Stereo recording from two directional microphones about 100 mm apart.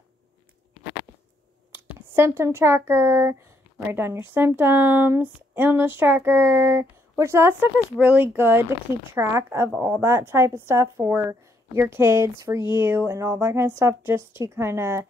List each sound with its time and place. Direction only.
1.9 s speech: 25° right (ahead or behind)